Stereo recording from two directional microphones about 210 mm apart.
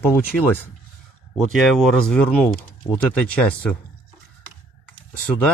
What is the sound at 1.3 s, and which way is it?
Speech, centre (ahead or behind).